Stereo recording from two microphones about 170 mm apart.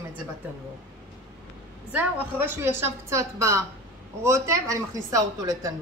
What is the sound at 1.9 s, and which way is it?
A woman's voice, 10° right (ahead or behind).